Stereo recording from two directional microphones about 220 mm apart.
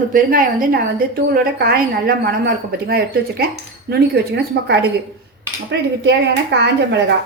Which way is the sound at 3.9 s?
50° right (ahead or behind).